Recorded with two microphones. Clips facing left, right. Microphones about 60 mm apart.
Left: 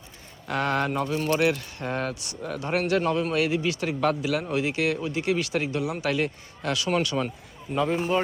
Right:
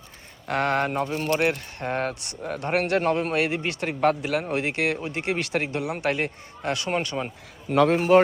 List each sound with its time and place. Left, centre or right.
0.4 s speech: right
7.7 s speech: right